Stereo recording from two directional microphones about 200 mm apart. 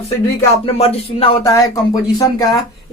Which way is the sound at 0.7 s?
30° left (ahead or behind).